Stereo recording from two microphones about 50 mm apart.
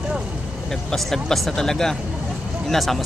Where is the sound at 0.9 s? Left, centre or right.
Centre.